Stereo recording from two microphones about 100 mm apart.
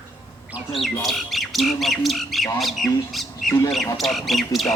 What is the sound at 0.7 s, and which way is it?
Speech, centre (ahead or behind).